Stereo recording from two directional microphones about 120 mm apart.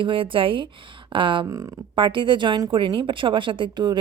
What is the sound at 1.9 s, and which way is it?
Speech, 45° right (ahead or behind).